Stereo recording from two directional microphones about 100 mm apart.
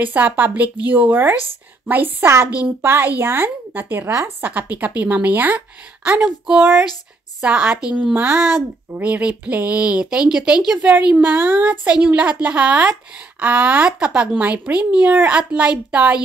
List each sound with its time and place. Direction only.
0.0 s speech: 20° right (ahead or behind)
6.2 s speech: 5° right (ahead or behind)